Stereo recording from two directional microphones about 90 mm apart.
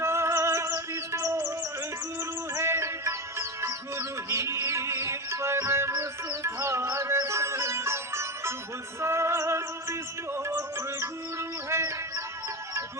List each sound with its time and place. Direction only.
0.0 s music: 30° right (ahead or behind)
2.6 s music: 30° right (ahead or behind)